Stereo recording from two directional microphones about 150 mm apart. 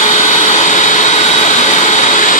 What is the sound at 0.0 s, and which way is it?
Vacuum cleaner, 50° left (ahead or behind).